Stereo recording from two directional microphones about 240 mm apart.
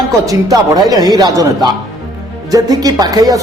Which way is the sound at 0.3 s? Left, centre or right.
Centre.